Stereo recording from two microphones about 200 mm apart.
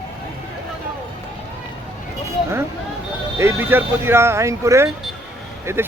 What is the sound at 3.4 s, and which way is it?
Speech, 10° right (ahead or behind).